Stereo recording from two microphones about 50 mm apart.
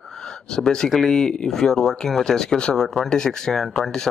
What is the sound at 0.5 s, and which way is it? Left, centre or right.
Speech, centre.